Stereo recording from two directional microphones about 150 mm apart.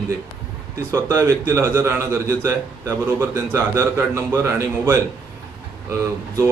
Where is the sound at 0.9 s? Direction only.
20° right (ahead or behind).